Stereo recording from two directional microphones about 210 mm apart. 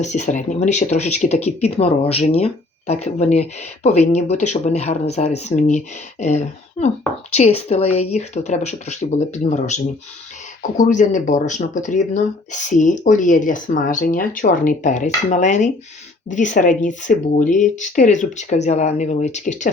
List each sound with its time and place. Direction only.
0.0 s speech: 35° left (ahead or behind)